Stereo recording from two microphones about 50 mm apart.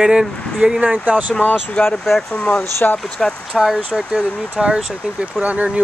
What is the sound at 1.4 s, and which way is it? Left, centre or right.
Speech, left.